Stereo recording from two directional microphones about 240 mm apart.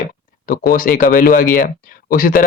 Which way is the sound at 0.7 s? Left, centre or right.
Left.